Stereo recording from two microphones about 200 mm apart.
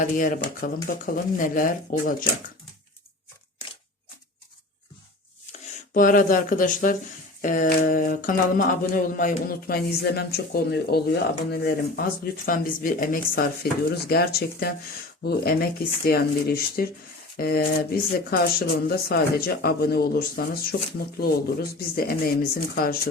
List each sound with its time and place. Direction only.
0.0 s speech: 40° left (ahead or behind)
1.0 s mantra: 45° left (ahead or behind)
5.5 s speech: 40° left (ahead or behind)
7.4 s mantra: 40° left (ahead or behind)